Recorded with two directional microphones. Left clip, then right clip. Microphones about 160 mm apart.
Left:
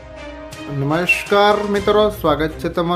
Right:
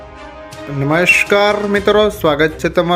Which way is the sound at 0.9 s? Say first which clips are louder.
Right 6 dB; 20° right (ahead or behind).